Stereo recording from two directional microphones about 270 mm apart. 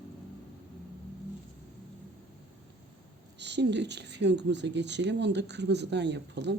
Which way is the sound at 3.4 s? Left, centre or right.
Right.